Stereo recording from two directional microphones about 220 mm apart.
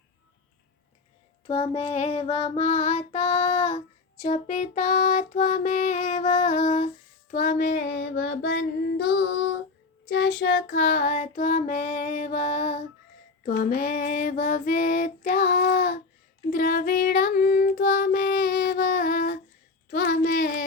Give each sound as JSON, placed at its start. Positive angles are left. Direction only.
{"t": 1.5, "sound": "child singing", "side_deg": 25}
{"t": 7.9, "sound": "child singing", "side_deg": 60}
{"t": 10.7, "sound": "child singing", "side_deg": 40}
{"t": 19.9, "sound": "a sound", "side_deg": 45}